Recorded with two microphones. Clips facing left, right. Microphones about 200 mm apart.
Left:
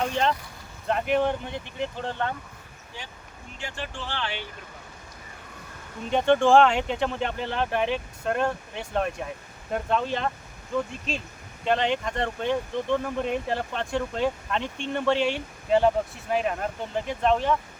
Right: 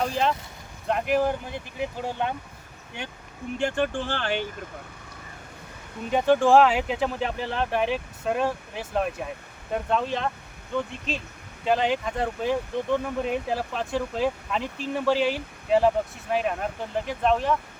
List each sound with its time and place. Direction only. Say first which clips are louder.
0.9 s speech: even; centre (ahead or behind)
3.6 s speech: right 10 dB; 55° right (ahead or behind)
6.1 s speech: even; 5° right (ahead or behind)